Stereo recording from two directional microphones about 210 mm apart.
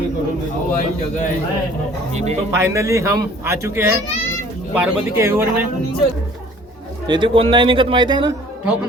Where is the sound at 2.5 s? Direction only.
15° right (ahead or behind).